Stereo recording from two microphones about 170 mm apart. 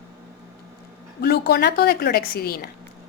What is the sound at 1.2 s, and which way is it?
A woman's voice, 70° left (ahead or behind).